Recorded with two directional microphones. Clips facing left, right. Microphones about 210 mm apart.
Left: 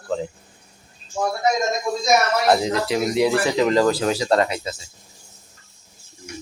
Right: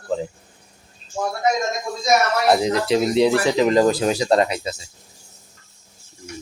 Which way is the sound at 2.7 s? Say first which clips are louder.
Right 3 dB; 25° right (ahead or behind).